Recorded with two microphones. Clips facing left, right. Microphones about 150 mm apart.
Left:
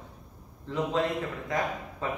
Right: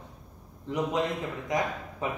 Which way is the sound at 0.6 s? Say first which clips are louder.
Even; 20° right (ahead or behind).